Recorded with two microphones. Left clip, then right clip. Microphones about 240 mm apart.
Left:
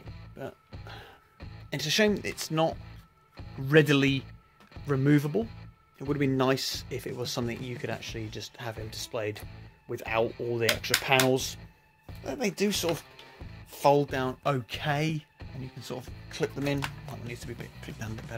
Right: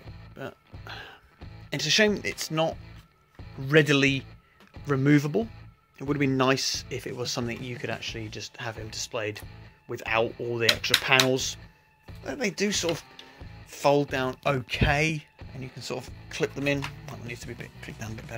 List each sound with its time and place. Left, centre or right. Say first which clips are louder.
0.4 s music: right 1 dB; centre
1.7 s speech: right 3 dB; centre